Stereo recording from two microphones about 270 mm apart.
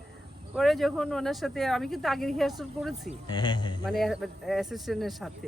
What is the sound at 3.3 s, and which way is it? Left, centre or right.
Speech, centre.